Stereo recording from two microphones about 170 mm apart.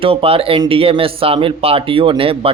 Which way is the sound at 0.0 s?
35° right (ahead or behind).